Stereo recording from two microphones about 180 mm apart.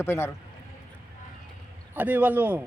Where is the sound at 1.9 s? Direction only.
10° right (ahead or behind).